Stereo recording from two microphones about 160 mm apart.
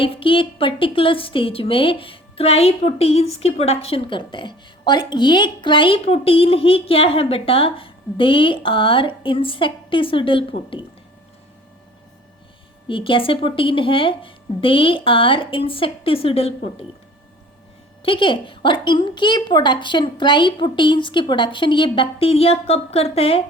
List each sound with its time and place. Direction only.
0.0 s a woman's voice: 35° left (ahead or behind)
12.9 s a woman's voice: 35° left (ahead or behind)
18.0 s a woman's voice: 30° left (ahead or behind)